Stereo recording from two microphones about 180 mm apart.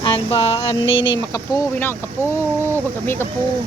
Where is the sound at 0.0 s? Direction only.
30° left (ahead or behind).